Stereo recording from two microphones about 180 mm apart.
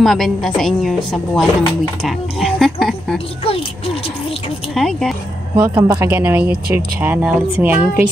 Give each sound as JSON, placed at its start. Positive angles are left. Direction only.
{"t": 0.0, "sound": "speech", "side_deg": 0}
{"t": 3.4, "sound": "speech", "side_deg": 30}
{"t": 4.7, "sound": "speech", "side_deg": 0}
{"t": 5.6, "sound": "speech", "side_deg": -10}